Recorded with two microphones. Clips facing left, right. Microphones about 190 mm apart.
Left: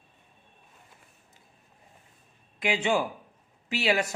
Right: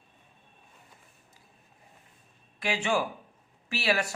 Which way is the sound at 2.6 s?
20° left (ahead or behind).